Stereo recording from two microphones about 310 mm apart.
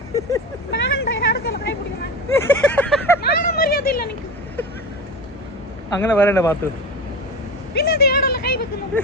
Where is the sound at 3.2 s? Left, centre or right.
Left.